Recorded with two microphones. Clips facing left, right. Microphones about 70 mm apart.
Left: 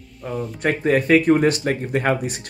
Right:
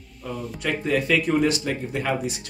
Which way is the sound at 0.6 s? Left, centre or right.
Left.